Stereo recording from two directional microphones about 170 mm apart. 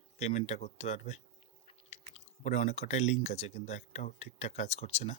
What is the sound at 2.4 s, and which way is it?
Speech, 45° left (ahead or behind).